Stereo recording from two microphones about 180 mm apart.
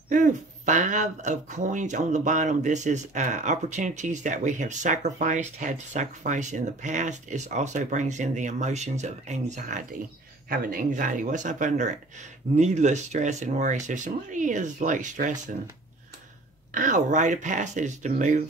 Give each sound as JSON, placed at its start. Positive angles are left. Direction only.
{"t": 0.1, "sound": "speech", "side_deg": -45}
{"t": 16.7, "sound": "speech", "side_deg": -45}